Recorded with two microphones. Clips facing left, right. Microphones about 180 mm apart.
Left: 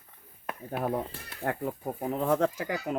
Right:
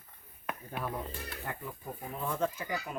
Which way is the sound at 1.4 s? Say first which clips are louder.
Left 13 dB; 65° left (ahead or behind).